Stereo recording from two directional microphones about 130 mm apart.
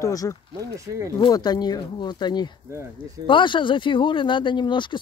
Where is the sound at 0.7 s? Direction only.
25° right (ahead or behind).